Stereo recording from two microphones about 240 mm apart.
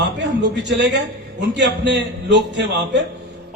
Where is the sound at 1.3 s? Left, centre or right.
Right.